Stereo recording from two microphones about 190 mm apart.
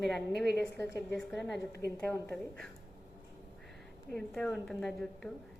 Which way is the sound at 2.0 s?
10° left (ahead or behind).